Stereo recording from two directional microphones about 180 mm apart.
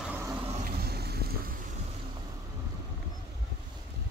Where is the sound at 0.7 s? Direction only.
60° right (ahead or behind).